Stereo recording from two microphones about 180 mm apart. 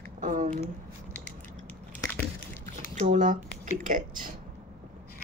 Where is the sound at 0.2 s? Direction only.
50° right (ahead or behind).